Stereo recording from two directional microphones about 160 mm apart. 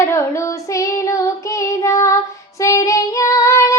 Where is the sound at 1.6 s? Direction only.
20° left (ahead or behind).